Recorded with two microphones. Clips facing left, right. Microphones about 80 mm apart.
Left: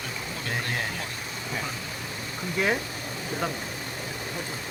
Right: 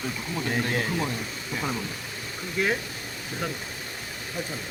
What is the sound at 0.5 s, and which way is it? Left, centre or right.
Speech, centre.